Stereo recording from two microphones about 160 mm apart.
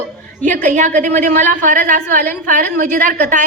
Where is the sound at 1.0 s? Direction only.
50° right (ahead or behind).